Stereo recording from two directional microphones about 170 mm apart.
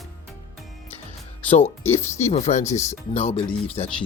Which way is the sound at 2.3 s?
40° left (ahead or behind).